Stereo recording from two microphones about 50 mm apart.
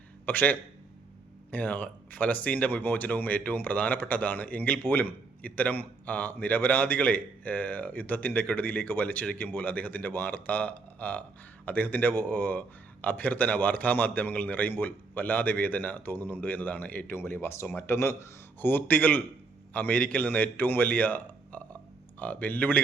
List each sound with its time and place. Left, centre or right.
0.3 s speech: left
17.2 s speech: left
17.9 s speech: left
18.6 s speech: left